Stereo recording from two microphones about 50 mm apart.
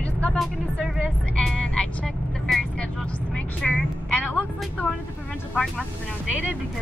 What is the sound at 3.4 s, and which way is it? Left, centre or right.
Vehicle, left.